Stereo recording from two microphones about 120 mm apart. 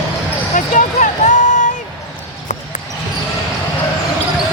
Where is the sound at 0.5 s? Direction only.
90° left.